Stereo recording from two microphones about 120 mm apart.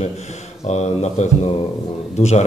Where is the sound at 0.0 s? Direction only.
70° left (ahead or behind).